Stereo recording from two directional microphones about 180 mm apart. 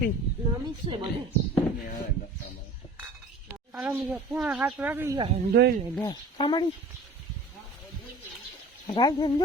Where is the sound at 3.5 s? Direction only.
10° right (ahead or behind).